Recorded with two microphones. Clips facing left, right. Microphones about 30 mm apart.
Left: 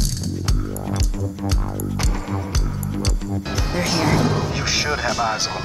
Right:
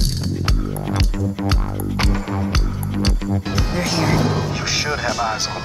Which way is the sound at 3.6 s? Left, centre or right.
Centre.